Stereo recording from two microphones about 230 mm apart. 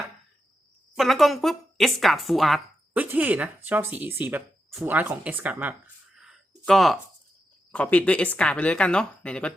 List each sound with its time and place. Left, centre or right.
0.9 s a woman's voice: centre